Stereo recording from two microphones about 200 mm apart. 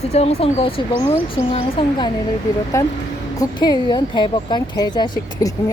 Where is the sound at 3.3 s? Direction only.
20° left (ahead or behind).